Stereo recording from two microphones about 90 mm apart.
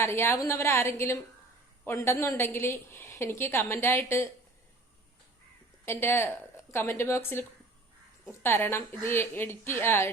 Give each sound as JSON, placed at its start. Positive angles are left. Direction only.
{"t": 0.0, "sound": "a woman's voice", "side_deg": 30}
{"t": 5.8, "sound": "a woman's voice", "side_deg": 25}
{"t": 8.4, "sound": "a woman's voice", "side_deg": 25}